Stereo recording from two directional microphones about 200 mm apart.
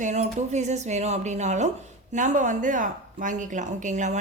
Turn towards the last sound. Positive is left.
turn(degrees=-35)  # may be behind; listen again after turning